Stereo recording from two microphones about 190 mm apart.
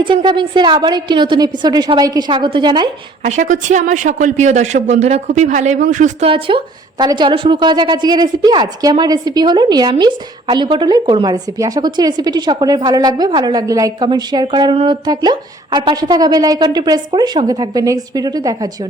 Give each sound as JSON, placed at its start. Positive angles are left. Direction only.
{"t": 0.0, "sound": "a woman's voice", "side_deg": -25}
{"t": 3.2, "sound": "a woman's voice", "side_deg": -40}